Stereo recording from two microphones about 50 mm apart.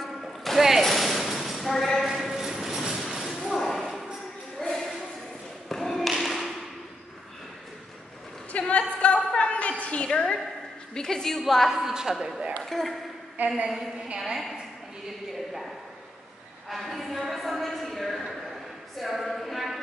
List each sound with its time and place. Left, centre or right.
0.6 s a woman's voice: centre
0.8 s a sound: centre
3.4 s thump: centre
4.6 s a sound: centre
5.7 s thump: centre
8.5 s a sound: left
11.0 s a woman's voice: centre
11.7 s a woman's voice: centre
12.6 s a woman's voice: centre
13.4 s a woman's voice: right
14.2 s a woman's voice: centre